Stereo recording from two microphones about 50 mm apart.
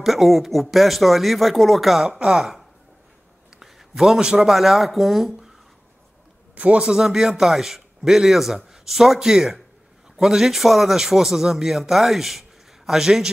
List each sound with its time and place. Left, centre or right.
0.0 s speech: centre
2.0 s a man's voice: centre
3.5 s a sound: centre
4.3 s speech: centre
6.5 s a man's voice: right
6.8 s a man's voice: centre